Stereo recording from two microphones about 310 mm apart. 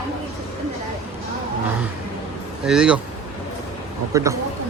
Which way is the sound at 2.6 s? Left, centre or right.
Centre.